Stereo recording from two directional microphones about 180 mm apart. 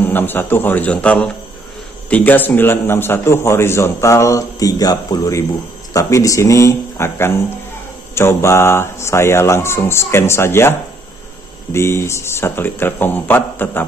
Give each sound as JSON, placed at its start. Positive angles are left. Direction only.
{"t": 0.0, "sound": "a man's voice", "side_deg": 10}